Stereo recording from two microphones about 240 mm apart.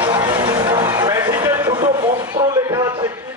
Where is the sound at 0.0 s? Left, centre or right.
Centre.